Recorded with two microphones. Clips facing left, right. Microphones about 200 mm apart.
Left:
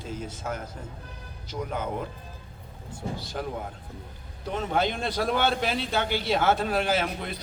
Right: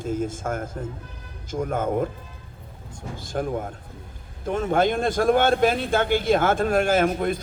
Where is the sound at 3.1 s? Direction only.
50° right (ahead or behind).